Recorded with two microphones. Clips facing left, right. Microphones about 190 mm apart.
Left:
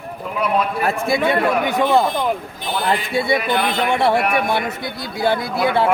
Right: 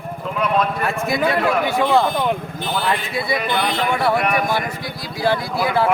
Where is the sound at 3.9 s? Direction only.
25° left (ahead or behind).